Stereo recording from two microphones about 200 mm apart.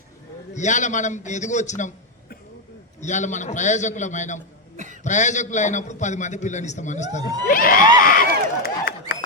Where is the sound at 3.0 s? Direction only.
35° left (ahead or behind).